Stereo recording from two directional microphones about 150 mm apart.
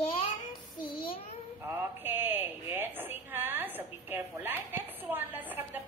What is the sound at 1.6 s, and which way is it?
A woman's voice, 15° right (ahead or behind).